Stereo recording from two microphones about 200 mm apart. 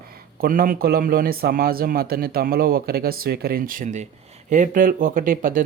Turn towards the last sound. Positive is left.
turn(degrees=-45)  # may be behind; listen again after turning